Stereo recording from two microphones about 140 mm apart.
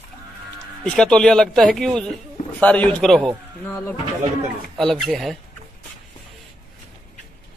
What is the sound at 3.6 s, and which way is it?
Speech, 20° left (ahead or behind).